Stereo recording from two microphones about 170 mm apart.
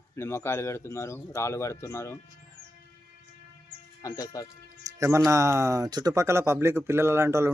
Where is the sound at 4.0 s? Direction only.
20° left (ahead or behind).